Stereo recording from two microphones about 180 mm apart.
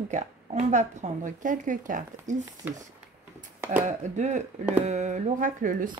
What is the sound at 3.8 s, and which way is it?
Speech, 40° right (ahead or behind).